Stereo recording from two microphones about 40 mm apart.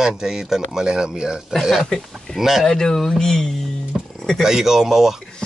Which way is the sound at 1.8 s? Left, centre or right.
Centre.